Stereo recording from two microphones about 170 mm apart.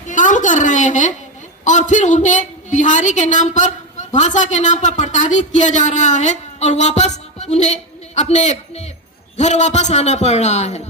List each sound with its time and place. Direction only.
0.1 s a woman's voice: 50° left (ahead or behind)